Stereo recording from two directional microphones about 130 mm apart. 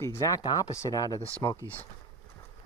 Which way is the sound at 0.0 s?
25° left (ahead or behind).